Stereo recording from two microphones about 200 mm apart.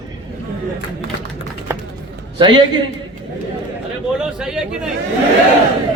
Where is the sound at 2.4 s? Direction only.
25° right (ahead or behind).